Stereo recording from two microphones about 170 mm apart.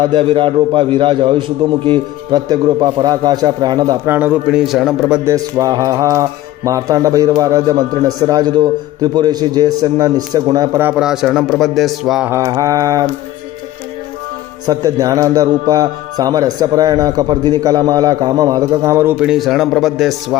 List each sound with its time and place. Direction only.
0.0 s a man's voice: 30° right (ahead or behind); by 5.2 s 5° right (ahead or behind)
5.2 s a man's voice: 20° right (ahead or behind); by 12.3 s centre (ahead or behind)
12.3 s a man's voice: 20° right (ahead or behind)
14.7 s a man's voice: 20° right (ahead or behind); by 20.1 s centre (ahead or behind)